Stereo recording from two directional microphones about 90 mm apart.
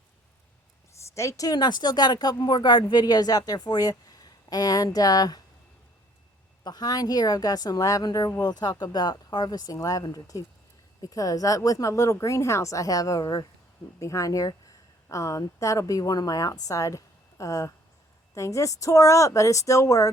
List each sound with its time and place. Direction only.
1.1 s speech: 35° left (ahead or behind)
1.5 s a woman's voice: 50° left (ahead or behind)
6.7 s a woman's voice: 50° left (ahead or behind)